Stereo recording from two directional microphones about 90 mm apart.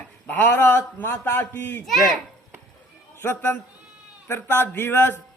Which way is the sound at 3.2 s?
25° left (ahead or behind).